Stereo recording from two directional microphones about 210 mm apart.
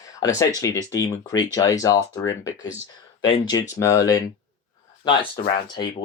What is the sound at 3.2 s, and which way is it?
Speech, 20° left (ahead or behind).